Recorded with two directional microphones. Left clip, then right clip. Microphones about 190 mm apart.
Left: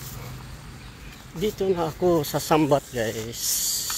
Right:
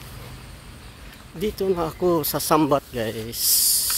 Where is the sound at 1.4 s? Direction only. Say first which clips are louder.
Right 1 dB; 25° right (ahead or behind).